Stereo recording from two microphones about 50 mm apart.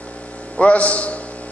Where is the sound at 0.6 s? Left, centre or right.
Left.